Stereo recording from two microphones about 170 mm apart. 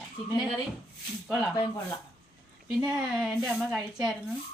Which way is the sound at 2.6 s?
5° right (ahead or behind).